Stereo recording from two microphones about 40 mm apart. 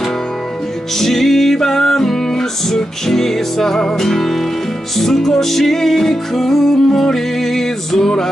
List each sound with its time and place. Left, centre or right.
0.9 s music: centre